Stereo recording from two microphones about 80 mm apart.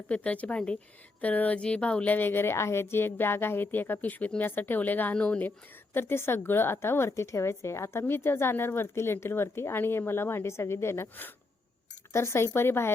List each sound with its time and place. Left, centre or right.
0.1 s a woman's voice: centre
5.5 s speech: left